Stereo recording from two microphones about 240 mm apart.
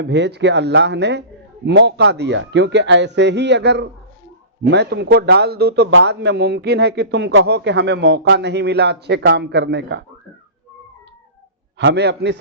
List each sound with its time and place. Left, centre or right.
0.0 s a man's voice: right
11.8 s a man's voice: right